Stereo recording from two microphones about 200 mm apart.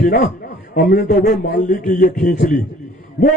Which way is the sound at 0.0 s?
45° left (ahead or behind).